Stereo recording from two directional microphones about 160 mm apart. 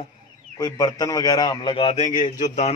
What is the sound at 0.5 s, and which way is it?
A man's voice, 25° left (ahead or behind).